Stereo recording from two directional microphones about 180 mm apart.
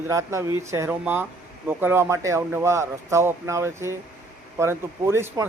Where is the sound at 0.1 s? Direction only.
15° right (ahead or behind).